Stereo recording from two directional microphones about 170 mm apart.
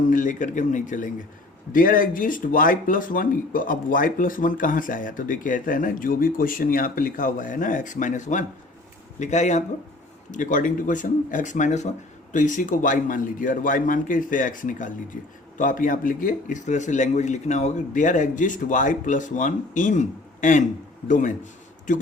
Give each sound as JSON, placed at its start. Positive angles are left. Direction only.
{"t": 0.0, "sound": "speech", "side_deg": 50}